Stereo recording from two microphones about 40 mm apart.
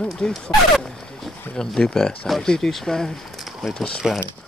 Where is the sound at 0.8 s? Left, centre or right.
Centre.